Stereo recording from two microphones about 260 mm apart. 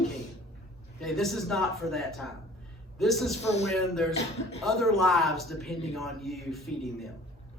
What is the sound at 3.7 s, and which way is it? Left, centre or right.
Speech, centre.